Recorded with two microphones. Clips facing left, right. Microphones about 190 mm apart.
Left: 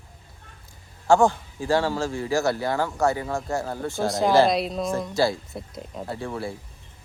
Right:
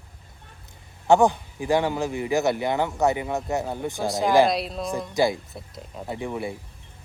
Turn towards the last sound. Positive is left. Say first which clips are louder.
# right 1 dB
turn(degrees=-15)  # may be behind; listen again after turning